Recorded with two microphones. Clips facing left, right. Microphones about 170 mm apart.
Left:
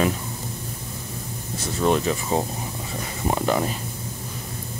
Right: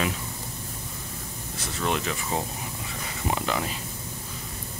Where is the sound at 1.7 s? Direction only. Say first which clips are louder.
Left 7 dB; 35° left (ahead or behind).